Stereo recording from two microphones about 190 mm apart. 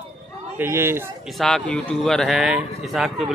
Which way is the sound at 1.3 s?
5° left (ahead or behind).